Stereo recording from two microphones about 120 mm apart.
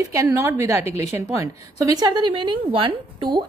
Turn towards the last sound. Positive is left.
turn(degrees=-45)  # may be behind; listen again after turning